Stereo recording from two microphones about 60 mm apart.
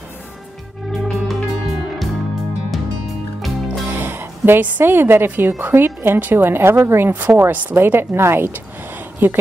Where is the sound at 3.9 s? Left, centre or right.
Right.